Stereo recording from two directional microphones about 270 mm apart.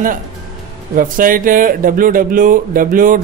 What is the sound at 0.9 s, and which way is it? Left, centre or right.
Speech, right.